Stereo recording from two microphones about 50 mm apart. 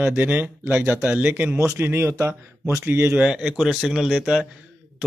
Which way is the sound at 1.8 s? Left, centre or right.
Right.